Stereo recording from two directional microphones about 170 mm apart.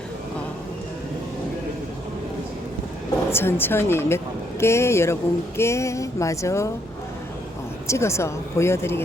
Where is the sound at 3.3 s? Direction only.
15° left (ahead or behind).